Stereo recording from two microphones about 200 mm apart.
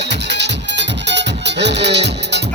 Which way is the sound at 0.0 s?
60° right (ahead or behind).